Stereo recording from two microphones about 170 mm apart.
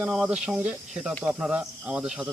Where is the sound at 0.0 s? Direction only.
5° right (ahead or behind).